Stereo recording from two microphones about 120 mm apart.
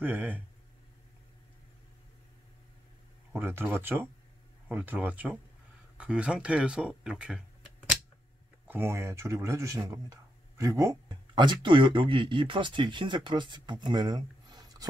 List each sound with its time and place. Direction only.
0.0 s speech: 15° right (ahead or behind)
3.3 s a man's voice: 20° right (ahead or behind)
8.6 s a man's voice: 20° right (ahead or behind); by 14.9 s 35° right (ahead or behind)